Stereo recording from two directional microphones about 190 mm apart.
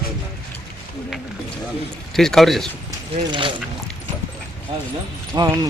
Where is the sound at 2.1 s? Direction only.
Centre (ahead or behind).